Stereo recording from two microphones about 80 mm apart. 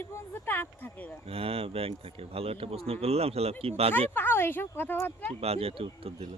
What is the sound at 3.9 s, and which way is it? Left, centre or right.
Speech, left.